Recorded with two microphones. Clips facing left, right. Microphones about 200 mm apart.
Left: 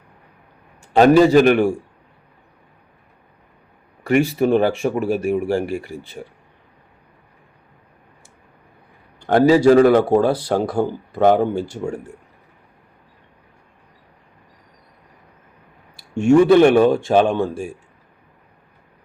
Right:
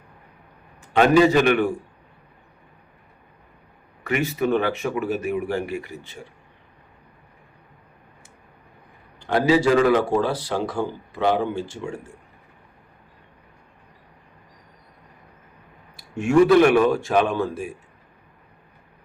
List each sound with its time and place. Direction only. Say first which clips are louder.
0.8 s a man's voice: left 4 dB; 40° left (ahead or behind)
4.2 s speech: left 5 dB; 30° left (ahead or behind)
9.2 s speech: left 6 dB; 45° left (ahead or behind)
16.0 s speech: left 4 dB; 30° left (ahead or behind)